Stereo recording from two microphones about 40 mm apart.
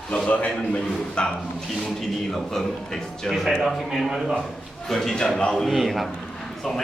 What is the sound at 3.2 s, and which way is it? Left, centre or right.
A man's voice, centre.